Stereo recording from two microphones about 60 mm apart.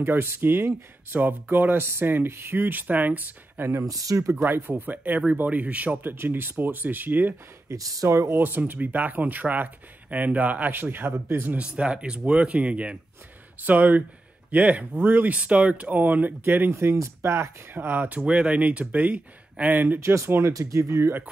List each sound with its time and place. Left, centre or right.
0.0 s speech: right
3.7 s speech: right
4.5 s speech: right
6.0 s speech: right
7.7 s speech: right
8.4 s speech: right
11.5 s speech: centre
15.0 s speech: right
15.2 s speech: right
16.7 s speech: right
17.7 s speech: right
20.0 s speech: right
20.5 s speech: right